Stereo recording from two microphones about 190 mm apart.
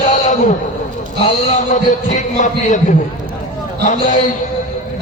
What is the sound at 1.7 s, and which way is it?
A man's voice, 40° left (ahead or behind).